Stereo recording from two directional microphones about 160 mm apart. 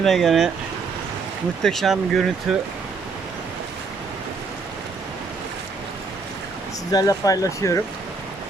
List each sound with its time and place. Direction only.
0.0 s speech: centre (ahead or behind)
1.6 s speech: centre (ahead or behind)
6.9 s speech: 20° left (ahead or behind)